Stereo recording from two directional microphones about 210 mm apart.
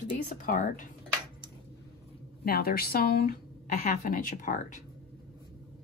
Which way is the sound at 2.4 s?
45° left (ahead or behind).